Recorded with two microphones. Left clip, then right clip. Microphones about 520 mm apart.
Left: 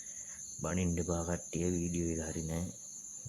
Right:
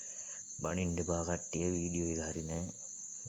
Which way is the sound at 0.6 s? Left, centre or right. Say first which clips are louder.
Even; left.